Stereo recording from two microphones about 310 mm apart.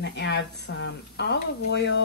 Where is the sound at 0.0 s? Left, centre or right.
Left.